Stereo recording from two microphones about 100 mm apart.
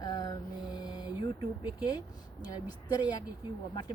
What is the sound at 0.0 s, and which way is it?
Mantra, 40° left (ahead or behind).